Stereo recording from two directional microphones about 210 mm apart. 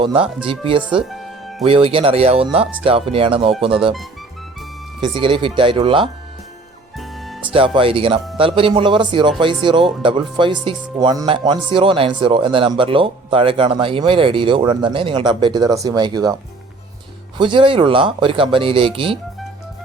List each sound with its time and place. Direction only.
0.0 s speech: 25° right (ahead or behind)
1.1 s music: centre (ahead or behind)
1.6 s speech: 25° right (ahead or behind)
5.0 s speech: 25° right (ahead or behind)
7.0 s music: centre (ahead or behind)
7.5 s speech: 25° right (ahead or behind)